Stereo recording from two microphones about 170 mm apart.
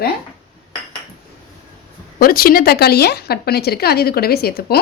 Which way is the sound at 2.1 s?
60° left (ahead or behind).